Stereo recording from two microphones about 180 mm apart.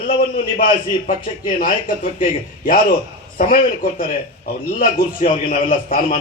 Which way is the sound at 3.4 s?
50° left (ahead or behind).